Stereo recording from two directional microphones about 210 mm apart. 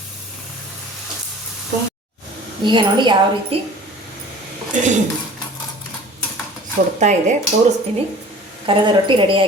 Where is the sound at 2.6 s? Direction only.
20° right (ahead or behind).